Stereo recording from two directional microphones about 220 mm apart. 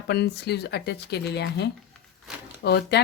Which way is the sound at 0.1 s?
50° left (ahead or behind).